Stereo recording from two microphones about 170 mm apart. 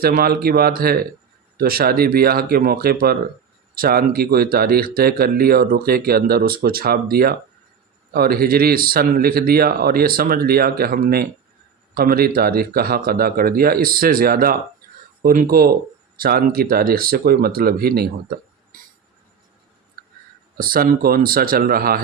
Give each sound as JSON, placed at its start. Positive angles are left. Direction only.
{"t": 0.0, "sound": "speech", "side_deg": -60}
{"t": 20.6, "sound": "speech", "side_deg": -55}